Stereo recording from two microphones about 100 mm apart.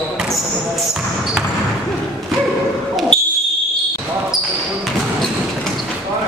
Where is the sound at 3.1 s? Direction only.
5° left (ahead or behind).